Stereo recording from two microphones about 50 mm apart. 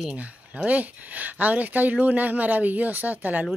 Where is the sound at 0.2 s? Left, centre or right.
Right.